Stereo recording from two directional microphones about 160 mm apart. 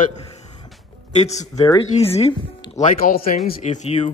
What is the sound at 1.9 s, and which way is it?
Speech, 40° left (ahead or behind).